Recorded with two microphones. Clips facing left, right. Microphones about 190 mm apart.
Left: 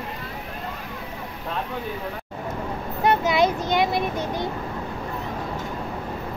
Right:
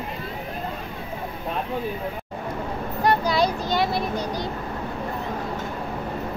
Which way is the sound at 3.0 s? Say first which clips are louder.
Left 1 dB; 20° left (ahead or behind).